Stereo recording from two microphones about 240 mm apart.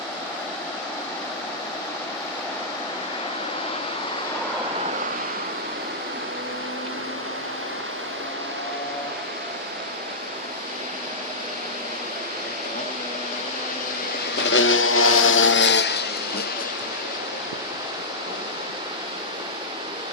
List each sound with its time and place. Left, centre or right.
14.5 s vehicle: left